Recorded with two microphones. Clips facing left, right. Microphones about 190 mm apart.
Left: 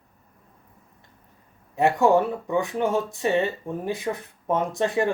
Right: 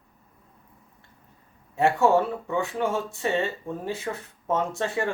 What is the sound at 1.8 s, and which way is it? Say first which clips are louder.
Speech: left 2 dB; 15° left (ahead or behind).